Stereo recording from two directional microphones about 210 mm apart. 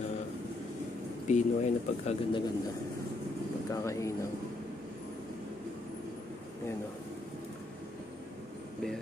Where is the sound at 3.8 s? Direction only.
15° left (ahead or behind).